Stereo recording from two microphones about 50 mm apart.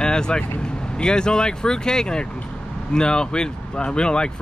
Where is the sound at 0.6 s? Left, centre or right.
Centre.